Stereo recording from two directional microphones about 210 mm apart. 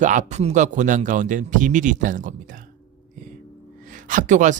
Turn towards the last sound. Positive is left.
turn(degrees=-35)  # may be behind; listen again after turning